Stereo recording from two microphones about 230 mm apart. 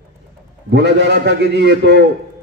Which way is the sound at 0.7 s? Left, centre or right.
Right.